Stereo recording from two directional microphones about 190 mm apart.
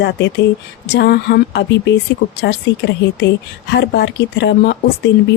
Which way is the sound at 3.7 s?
60° left (ahead or behind).